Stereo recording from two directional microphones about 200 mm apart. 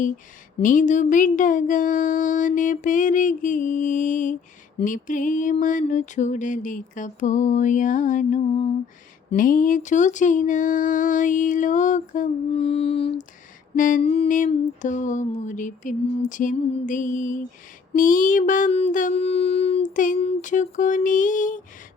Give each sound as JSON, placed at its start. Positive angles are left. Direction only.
{"t": 0.6, "sound": "music", "side_deg": 40}
{"t": 13.7, "sound": "music", "side_deg": 40}
{"t": 14.0, "sound": "music", "side_deg": 30}